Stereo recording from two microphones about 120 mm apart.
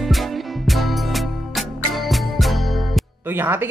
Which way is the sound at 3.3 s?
15° right (ahead or behind).